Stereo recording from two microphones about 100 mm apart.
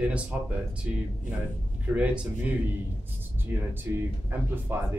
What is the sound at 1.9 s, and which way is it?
Speech, 10° right (ahead or behind).